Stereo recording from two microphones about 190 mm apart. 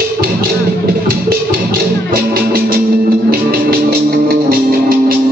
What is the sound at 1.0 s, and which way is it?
Music, 50° right (ahead or behind).